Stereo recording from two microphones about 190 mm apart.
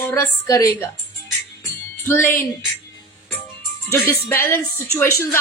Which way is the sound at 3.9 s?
10° left (ahead or behind).